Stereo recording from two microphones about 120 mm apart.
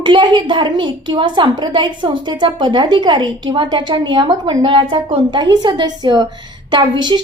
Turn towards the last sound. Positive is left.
turn(degrees=-40)  # may be behind; listen again after turning